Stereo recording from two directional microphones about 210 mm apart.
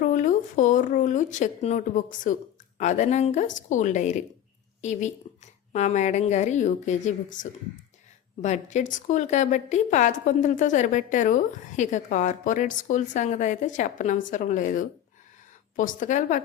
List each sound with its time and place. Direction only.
0.0 s a woman's voice: 40° left (ahead or behind)